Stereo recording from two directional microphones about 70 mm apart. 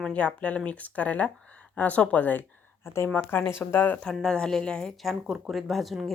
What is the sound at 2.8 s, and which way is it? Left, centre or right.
Speech, left.